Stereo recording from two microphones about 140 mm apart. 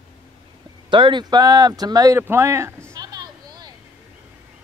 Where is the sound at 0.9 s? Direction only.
35° right (ahead or behind); by 2.7 s 20° right (ahead or behind).